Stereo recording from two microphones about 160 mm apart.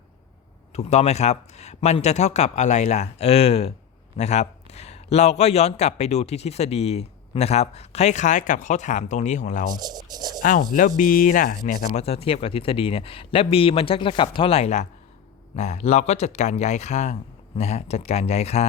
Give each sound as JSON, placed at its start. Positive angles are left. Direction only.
{"t": 0.7, "sound": "speech", "side_deg": 45}
{"t": 9.7, "sound": "a sound", "side_deg": -25}
{"t": 10.4, "sound": "speech", "side_deg": 55}
{"t": 12.0, "sound": "speech", "side_deg": 40}